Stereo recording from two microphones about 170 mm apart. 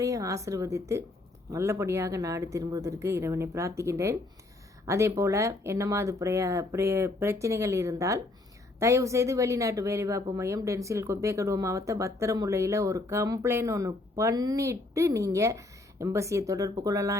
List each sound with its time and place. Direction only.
0.0 s a woman's voice: 20° right (ahead or behind)